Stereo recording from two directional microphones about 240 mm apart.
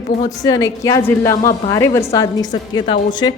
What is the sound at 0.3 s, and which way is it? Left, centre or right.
A woman's voice, centre.